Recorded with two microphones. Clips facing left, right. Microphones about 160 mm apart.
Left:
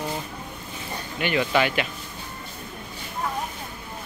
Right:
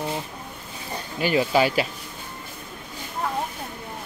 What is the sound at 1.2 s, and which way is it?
Speech, 35° right (ahead or behind).